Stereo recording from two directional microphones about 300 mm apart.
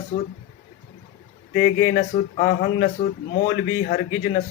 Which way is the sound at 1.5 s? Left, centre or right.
Left.